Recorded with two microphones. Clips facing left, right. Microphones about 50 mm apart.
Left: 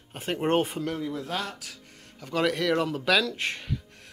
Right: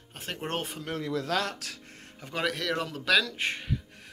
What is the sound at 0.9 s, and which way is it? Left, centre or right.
Speech, right.